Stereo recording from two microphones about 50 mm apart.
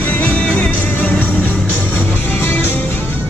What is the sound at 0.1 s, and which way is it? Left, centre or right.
Music, left.